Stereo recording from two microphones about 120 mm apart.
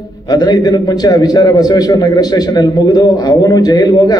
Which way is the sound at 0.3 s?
35° left (ahead or behind).